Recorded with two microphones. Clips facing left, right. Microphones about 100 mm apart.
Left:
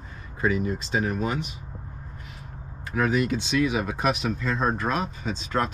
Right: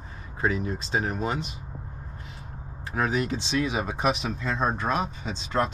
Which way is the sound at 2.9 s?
35° right (ahead or behind).